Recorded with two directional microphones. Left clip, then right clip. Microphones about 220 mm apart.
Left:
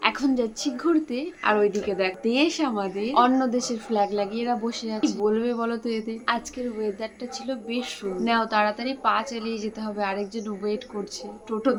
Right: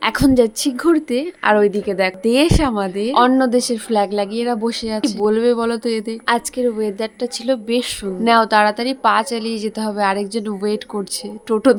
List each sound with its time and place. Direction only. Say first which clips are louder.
0.0 s a woman's voice: right 9 dB; 45° right (ahead or behind)